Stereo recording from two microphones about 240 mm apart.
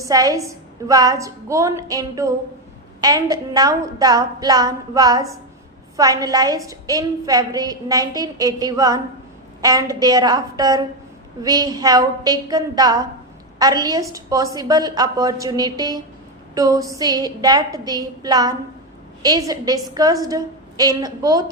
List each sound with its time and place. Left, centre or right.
0.0 s a woman's voice: centre